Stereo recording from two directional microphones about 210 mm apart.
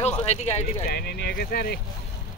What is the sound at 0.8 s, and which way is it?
Speech, 50° left (ahead or behind).